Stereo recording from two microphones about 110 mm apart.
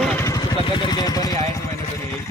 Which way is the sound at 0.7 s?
40° left (ahead or behind).